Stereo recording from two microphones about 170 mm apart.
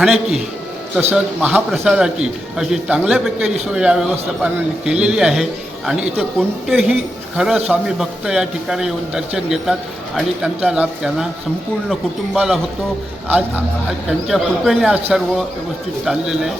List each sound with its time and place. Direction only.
0.0 s a man's voice: centre (ahead or behind)
13.8 s a man's voice: centre (ahead or behind)
16.0 s a man's voice: 5° right (ahead or behind)